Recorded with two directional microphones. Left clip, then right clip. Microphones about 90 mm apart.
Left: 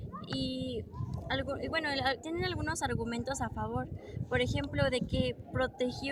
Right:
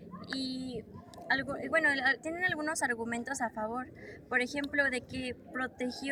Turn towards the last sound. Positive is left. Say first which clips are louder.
# left 4 dB
turn(degrees=25)  # may be behind; listen again after turning